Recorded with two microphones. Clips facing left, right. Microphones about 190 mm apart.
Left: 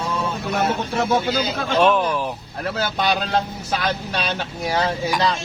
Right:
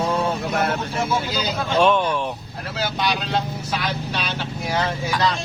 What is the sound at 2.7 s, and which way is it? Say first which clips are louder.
Speech: left 1 dB; 50° left (ahead or behind).